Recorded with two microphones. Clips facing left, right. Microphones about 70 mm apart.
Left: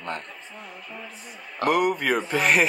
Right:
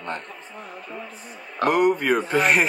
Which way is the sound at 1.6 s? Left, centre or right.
Right.